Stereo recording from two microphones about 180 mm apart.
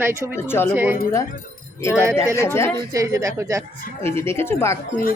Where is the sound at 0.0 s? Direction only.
10° right (ahead or behind).